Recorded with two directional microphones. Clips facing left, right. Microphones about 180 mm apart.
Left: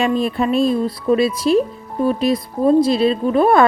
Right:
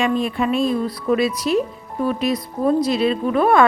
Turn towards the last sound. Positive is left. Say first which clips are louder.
# left 2 dB
turn(degrees=35)  # may be behind; listen again after turning